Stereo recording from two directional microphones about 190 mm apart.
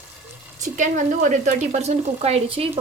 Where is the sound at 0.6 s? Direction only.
40° right (ahead or behind).